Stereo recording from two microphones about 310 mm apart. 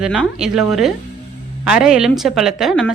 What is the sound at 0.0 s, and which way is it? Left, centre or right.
Speech, centre.